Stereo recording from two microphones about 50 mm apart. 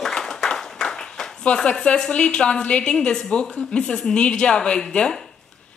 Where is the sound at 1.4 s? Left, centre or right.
Centre.